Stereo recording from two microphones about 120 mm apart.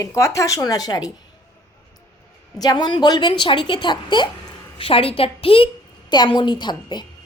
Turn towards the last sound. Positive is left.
turn(degrees=40)  # may be behind; listen again after turning